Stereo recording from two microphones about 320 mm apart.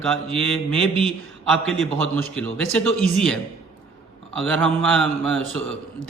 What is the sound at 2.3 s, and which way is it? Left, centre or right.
A man's voice, centre.